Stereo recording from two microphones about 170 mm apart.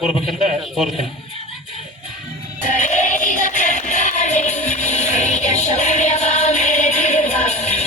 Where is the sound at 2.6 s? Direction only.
45° left (ahead or behind).